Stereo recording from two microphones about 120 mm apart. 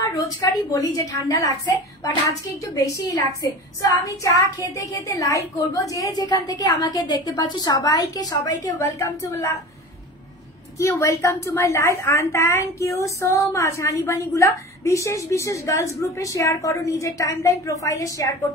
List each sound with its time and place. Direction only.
0.0 s a woman's voice: 30° left (ahead or behind)
10.8 s a woman's voice: 25° left (ahead or behind)